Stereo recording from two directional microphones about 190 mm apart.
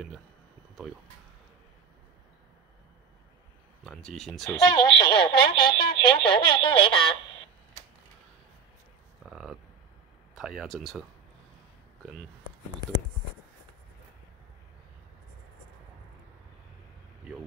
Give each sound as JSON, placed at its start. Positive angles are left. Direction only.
{"t": 3.8, "sound": "speech", "side_deg": 0}
{"t": 4.5, "sound": "speech", "side_deg": 20}
{"t": 9.2, "sound": "a sound", "side_deg": 0}
{"t": 10.3, "sound": "speech", "side_deg": 0}